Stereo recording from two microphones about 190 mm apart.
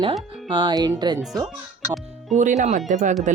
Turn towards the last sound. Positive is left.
turn(degrees=-40)  # may be behind; listen again after turning